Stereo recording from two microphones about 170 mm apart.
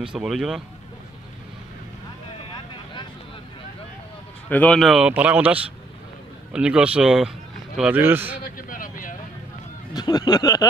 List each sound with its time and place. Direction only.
0.0 s speech: 5° right (ahead or behind)
4.5 s a man's voice: 5° left (ahead or behind); by 8.4 s 10° right (ahead or behind)
8.5 s vehicle: 55° left (ahead or behind)
9.9 s speech: 25° left (ahead or behind)